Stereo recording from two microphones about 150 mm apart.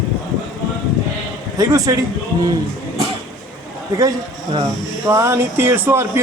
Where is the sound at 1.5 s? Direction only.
25° right (ahead or behind).